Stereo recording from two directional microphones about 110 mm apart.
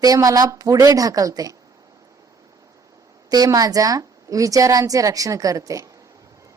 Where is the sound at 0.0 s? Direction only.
35° right (ahead or behind).